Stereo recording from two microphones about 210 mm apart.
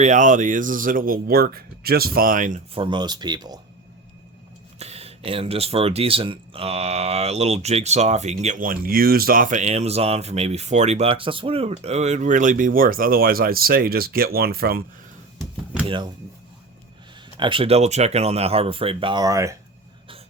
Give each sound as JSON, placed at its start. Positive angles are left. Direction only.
{"t": 0.0, "sound": "speech", "side_deg": -35}
{"t": 2.7, "sound": "speech", "side_deg": -20}
{"t": 4.8, "sound": "speech", "side_deg": -30}
{"t": 15.9, "sound": "speech", "side_deg": -20}
{"t": 17.3, "sound": "speech", "side_deg": -25}